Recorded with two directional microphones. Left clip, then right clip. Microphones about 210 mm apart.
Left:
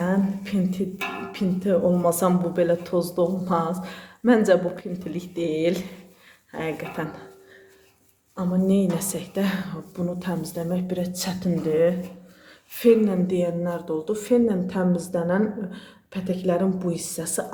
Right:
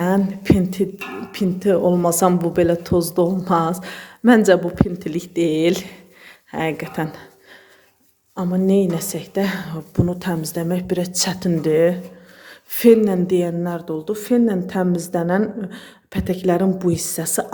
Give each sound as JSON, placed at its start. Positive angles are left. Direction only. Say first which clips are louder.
{"t": 0.0, "sound": "a sound", "louder": "right 5 dB", "side_deg": -30}
{"t": 1.3, "sound": "speech", "louder": "right 6 dB", "side_deg": -30}
{"t": 8.4, "sound": "a woman's voice", "louder": "right 6 dB", "side_deg": -25}